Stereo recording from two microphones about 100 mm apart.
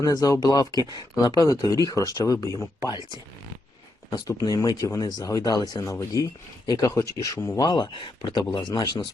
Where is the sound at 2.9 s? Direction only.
45° left (ahead or behind).